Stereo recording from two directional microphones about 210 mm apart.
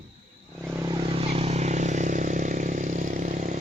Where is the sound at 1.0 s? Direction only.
25° right (ahead or behind).